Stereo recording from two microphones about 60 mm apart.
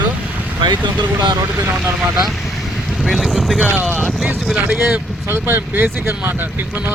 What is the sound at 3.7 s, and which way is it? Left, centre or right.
Speech, right.